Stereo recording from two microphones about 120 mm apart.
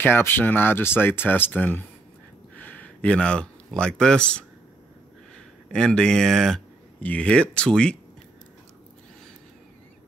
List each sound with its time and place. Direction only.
0.0 s speech: 20° left (ahead or behind)
5.7 s speech: 5° left (ahead or behind)